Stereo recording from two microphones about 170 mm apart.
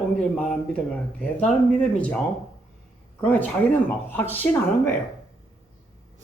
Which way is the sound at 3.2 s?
10° left (ahead or behind).